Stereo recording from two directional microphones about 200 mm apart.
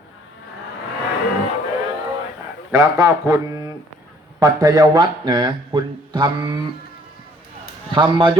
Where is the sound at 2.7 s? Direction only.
15° right (ahead or behind).